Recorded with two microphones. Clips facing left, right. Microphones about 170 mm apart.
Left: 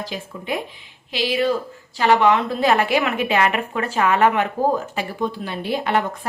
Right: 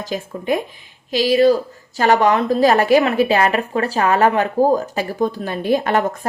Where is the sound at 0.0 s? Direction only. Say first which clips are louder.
Right 5 dB; 45° right (ahead or behind).